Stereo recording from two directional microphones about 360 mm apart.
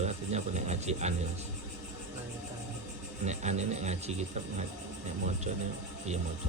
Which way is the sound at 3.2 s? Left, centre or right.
Centre.